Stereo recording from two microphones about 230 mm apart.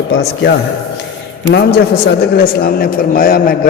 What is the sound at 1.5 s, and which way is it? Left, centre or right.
A man's voice, left.